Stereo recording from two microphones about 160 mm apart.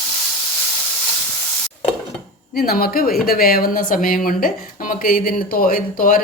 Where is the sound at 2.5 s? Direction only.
70° left (ahead or behind).